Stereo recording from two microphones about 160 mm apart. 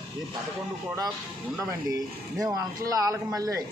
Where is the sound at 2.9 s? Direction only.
20° right (ahead or behind).